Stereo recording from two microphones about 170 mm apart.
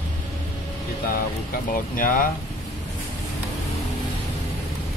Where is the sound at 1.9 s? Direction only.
55° left (ahead or behind).